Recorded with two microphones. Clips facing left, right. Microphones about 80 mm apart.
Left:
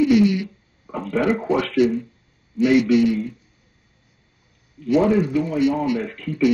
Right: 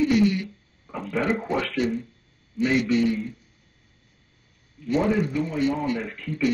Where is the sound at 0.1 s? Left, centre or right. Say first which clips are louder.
Left 4 dB; centre.